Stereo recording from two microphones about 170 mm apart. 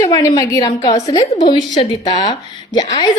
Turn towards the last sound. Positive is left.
turn(degrees=25)  # may be behind; listen again after turning